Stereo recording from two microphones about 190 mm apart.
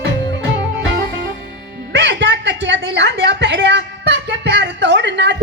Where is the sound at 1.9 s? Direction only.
70° right (ahead or behind).